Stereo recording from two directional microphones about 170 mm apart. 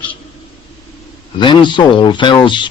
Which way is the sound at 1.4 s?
25° left (ahead or behind).